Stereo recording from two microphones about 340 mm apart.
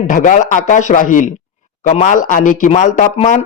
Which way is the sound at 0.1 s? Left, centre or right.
Left.